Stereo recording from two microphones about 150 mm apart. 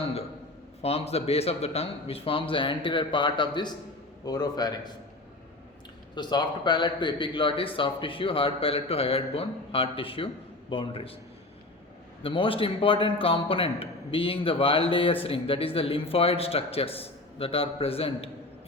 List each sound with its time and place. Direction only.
0.8 s a man's voice: 45° left (ahead or behind); by 4.9 s 30° left (ahead or behind)
6.1 s a man's voice: 30° left (ahead or behind)
12.2 s a man's voice: 35° left (ahead or behind)